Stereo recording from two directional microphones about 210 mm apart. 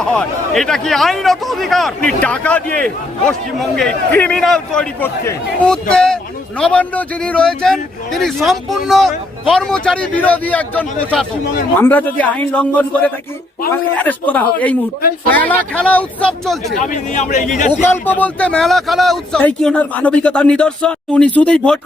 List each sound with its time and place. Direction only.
0.0 s a man's voice: 5° left (ahead or behind)
16.7 s speech: 35° left (ahead or behind)
17.8 s speech: 10° left (ahead or behind)